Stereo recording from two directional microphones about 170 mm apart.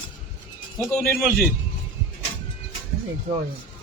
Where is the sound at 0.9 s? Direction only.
Centre (ahead or behind).